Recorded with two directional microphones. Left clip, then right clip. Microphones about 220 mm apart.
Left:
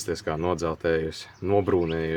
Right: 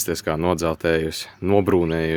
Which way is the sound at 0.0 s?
50° right (ahead or behind).